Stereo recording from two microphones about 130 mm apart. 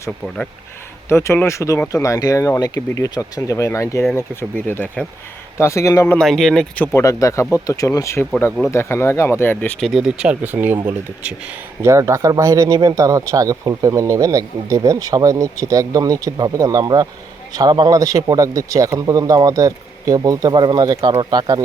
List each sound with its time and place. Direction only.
1.0 s speech: 20° left (ahead or behind)
6.1 s speech: 5° left (ahead or behind)
6.8 s speech: 20° left (ahead or behind)
9.8 s speech: 5° right (ahead or behind)
11.9 s speech: 20° right (ahead or behind)